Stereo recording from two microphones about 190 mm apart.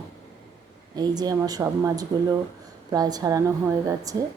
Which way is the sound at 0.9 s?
20° right (ahead or behind).